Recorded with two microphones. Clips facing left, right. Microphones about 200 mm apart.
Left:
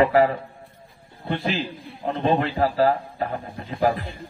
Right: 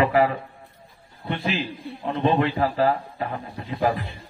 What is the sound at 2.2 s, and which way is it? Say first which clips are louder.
A man's voice: even; 45° left (ahead or behind).